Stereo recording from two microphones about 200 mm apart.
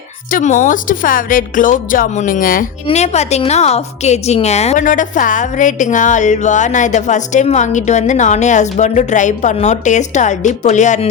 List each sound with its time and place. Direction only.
0.3 s a woman's voice: 40° left (ahead or behind)